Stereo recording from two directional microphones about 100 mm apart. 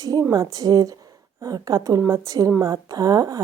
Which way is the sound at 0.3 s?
40° right (ahead or behind).